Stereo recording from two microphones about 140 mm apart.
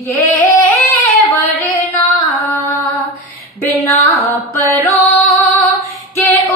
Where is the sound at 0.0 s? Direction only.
20° left (ahead or behind).